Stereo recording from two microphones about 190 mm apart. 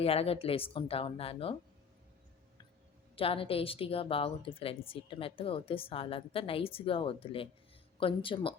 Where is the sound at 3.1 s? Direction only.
30° left (ahead or behind).